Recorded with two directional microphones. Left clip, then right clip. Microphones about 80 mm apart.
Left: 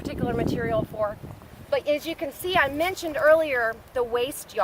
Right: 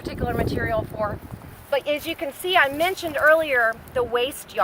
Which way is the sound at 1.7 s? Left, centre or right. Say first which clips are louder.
Right 1 dB; left.